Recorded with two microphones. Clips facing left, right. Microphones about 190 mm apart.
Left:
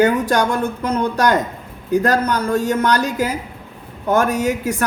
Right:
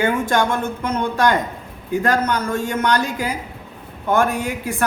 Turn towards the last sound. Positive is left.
turn(degrees=45)  # may be behind; listen again after turning